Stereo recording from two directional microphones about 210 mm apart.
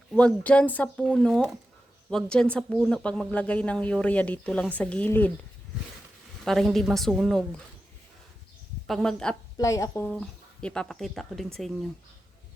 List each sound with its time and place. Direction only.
0.1 s speech: 5° left (ahead or behind)
6.4 s speech: centre (ahead or behind)
8.9 s speech: centre (ahead or behind)
9.6 s speech: 15° left (ahead or behind)